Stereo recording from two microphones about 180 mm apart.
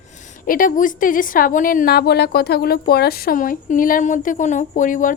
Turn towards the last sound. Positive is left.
turn(degrees=45)  # may be behind; listen again after turning